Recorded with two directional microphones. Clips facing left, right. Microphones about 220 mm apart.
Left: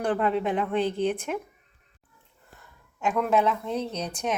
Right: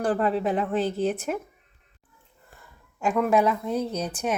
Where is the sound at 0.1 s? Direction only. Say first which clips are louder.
Even; 35° right (ahead or behind).